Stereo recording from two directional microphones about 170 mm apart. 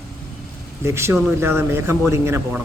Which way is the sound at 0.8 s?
15° right (ahead or behind).